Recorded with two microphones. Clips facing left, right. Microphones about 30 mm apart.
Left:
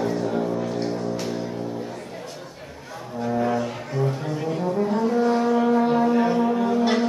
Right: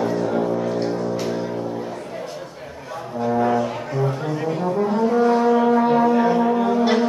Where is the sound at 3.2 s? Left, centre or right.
Centre.